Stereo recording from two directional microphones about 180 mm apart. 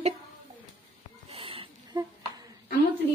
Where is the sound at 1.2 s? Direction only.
30° right (ahead or behind).